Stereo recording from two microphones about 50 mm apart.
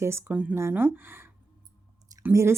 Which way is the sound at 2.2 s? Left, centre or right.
Right.